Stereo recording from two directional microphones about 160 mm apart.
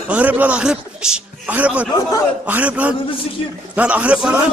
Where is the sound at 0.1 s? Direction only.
10° right (ahead or behind).